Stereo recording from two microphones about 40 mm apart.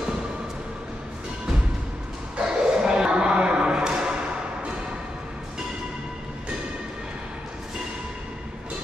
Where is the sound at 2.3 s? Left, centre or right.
Right.